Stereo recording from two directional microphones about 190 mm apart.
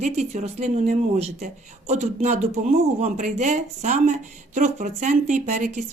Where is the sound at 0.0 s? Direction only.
35° right (ahead or behind).